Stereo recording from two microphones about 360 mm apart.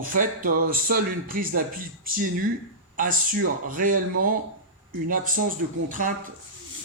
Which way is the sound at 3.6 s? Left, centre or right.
Right.